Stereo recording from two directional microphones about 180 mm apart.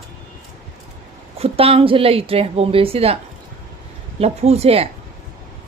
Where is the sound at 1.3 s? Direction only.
35° right (ahead or behind).